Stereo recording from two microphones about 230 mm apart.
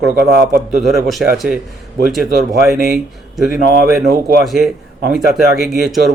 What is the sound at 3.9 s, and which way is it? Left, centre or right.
Speech, right.